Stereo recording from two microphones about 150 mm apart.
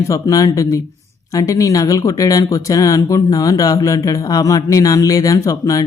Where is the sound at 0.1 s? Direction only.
20° left (ahead or behind).